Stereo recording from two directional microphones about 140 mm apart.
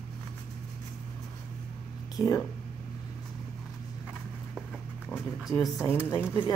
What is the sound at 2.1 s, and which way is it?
Speech, 25° left (ahead or behind).